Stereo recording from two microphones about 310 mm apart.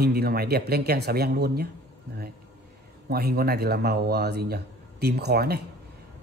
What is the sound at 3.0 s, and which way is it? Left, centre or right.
A man's voice, right.